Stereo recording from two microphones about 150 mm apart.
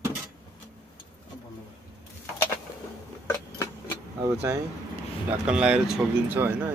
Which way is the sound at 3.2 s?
20° left (ahead or behind).